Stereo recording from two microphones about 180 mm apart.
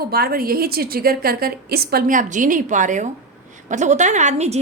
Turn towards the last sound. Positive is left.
turn(degrees=-40)  # may be behind; listen again after turning